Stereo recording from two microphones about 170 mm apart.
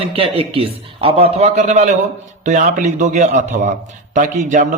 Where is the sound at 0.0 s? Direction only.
35° right (ahead or behind).